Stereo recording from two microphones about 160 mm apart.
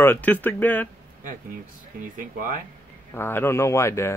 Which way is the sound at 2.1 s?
60° right (ahead or behind).